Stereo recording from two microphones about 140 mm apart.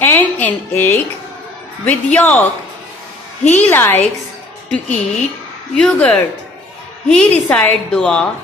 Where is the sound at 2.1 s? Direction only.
10° left (ahead or behind).